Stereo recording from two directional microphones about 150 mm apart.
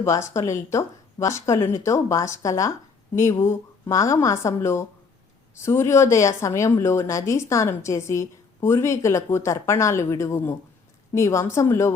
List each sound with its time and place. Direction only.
0.0 s speech: 20° left (ahead or behind)